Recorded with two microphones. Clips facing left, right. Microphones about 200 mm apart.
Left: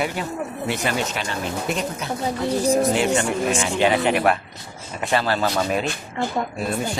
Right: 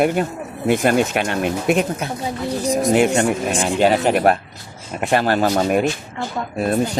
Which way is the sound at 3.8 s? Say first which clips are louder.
Right 4 dB; 40° right (ahead or behind).